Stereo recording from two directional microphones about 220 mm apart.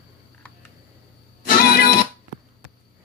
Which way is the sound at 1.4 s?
45° left (ahead or behind).